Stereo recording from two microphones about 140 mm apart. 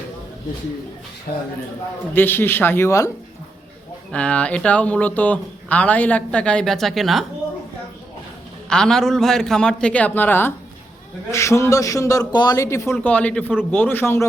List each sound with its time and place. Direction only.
1.3 s a man's voice: 90° left
2.1 s speech: 15° left (ahead or behind)
4.1 s speech: 10° left (ahead or behind)
8.7 s a man's voice: 5° left (ahead or behind)